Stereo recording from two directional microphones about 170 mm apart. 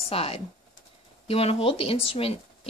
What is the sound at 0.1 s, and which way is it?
Speech, 35° left (ahead or behind).